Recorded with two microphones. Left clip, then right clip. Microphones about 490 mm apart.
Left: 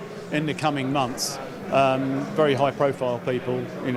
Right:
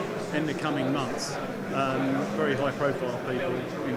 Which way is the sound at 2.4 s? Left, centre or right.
Left.